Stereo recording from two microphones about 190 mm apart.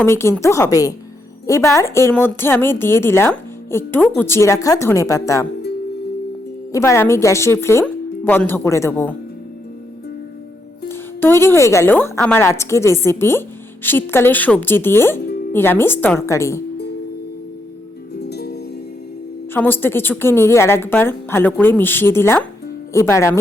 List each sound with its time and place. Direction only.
0.0 s a woman's voice: 15° left (ahead or behind)
6.7 s a woman's voice: 15° left (ahead or behind)
10.8 s a woman's voice: 10° left (ahead or behind)
18.1 s music: 60° left (ahead or behind)
19.5 s a woman's voice: 10° left (ahead or behind)